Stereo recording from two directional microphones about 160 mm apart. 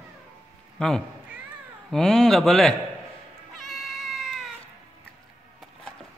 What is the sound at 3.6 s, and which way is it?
Cat, centre (ahead or behind).